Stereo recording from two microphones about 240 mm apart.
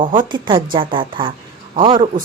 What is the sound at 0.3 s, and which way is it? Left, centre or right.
Speech, centre.